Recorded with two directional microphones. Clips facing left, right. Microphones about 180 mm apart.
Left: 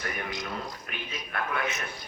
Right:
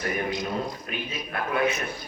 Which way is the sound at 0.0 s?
25° right (ahead or behind).